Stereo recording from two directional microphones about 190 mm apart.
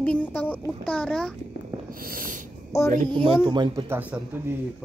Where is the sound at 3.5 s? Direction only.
25° right (ahead or behind).